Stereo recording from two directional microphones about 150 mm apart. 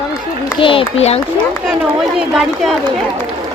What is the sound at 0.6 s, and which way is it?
Speech, 35° left (ahead or behind).